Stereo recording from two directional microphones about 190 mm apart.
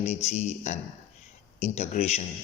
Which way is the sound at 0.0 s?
35° left (ahead or behind).